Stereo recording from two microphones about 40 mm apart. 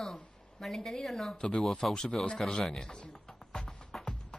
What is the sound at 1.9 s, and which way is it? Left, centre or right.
Speech, centre.